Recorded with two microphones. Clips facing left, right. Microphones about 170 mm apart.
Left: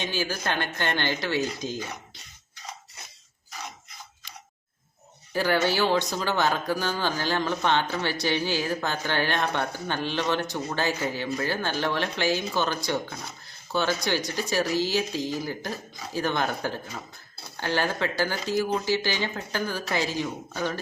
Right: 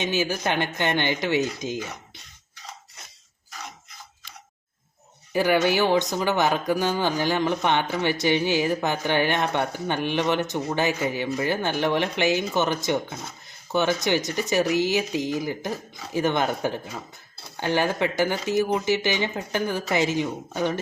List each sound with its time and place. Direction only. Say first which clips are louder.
0.0 s speech: right 4 dB; 20° right (ahead or behind)
5.3 s speech: right 3 dB; 15° right (ahead or behind)